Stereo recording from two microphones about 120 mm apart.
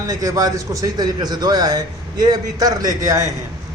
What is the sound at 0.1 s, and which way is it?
A man's voice, 30° right (ahead or behind).